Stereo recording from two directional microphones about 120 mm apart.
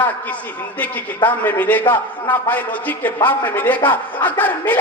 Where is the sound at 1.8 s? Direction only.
40° left (ahead or behind).